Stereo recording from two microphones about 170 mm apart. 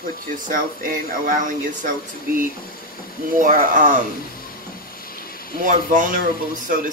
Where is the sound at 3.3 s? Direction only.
50° right (ahead or behind).